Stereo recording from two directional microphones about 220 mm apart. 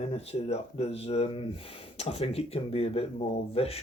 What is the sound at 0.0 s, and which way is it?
Speech, 25° left (ahead or behind).